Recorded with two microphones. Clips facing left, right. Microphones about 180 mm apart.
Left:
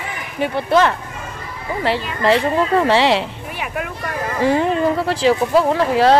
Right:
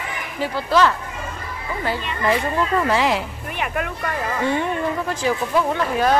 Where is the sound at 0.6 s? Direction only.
25° left (ahead or behind).